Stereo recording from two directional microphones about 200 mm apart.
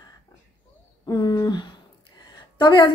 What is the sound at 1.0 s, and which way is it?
A woman's voice, 20° left (ahead or behind).